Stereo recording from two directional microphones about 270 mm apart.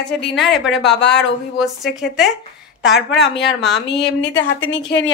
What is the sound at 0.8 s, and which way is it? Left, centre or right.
Speech, left.